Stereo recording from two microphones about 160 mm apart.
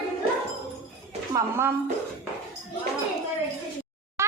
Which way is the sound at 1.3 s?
20° right (ahead or behind).